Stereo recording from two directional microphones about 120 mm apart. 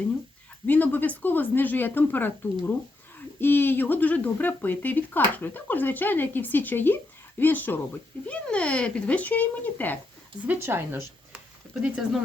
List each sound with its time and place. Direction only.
0.7 s speech: 15° left (ahead or behind)
10.4 s speech: 15° right (ahead or behind)
11.3 s a sound: 5° right (ahead or behind)